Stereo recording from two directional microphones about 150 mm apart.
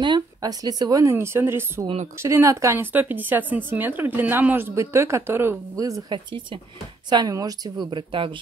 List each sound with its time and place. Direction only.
0.0 s a woman's voice: 30° right (ahead or behind)